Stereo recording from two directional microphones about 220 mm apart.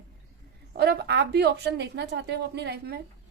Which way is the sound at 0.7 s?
45° right (ahead or behind).